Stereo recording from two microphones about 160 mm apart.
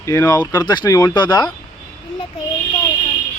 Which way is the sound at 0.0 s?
20° left (ahead or behind).